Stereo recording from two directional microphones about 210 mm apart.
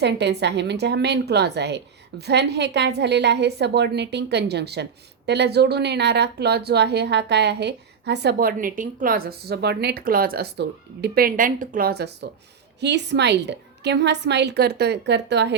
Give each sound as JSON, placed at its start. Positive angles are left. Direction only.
{"t": 0.0, "sound": "a woman's voice", "side_deg": -55}